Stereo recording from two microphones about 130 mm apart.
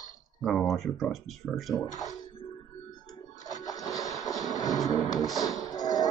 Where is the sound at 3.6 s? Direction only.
25° left (ahead or behind).